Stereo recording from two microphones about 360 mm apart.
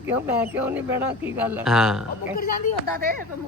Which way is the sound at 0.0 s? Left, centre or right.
Centre.